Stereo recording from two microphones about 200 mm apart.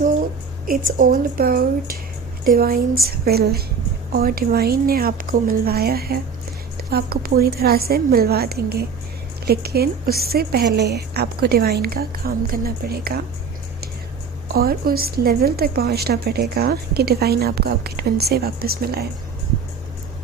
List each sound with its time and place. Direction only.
0.9 s a woman's voice: 45° right (ahead or behind)
14.4 s a woman's voice: 50° right (ahead or behind)